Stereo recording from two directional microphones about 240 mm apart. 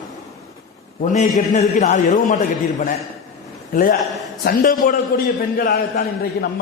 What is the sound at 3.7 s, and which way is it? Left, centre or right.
A man's voice, left.